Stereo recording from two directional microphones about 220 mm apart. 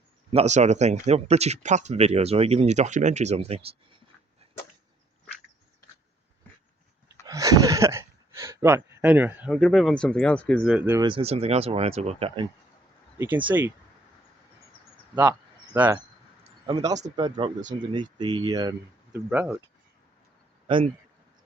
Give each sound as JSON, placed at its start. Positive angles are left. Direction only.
{"t": 0.3, "sound": "speech", "side_deg": -30}
{"t": 7.3, "sound": "a sound", "side_deg": -15}
{"t": 9.6, "sound": "speech", "side_deg": 0}
{"t": 10.6, "sound": "speech", "side_deg": -5}
{"t": 11.0, "sound": "speech", "side_deg": -25}
{"t": 13.1, "sound": "speech", "side_deg": -10}
{"t": 15.1, "sound": "speech", "side_deg": -10}
{"t": 17.2, "sound": "speech", "side_deg": -20}
{"t": 17.6, "sound": "speech", "side_deg": -35}
{"t": 17.9, "sound": "speech", "side_deg": -20}
{"t": 20.7, "sound": "speech", "side_deg": -20}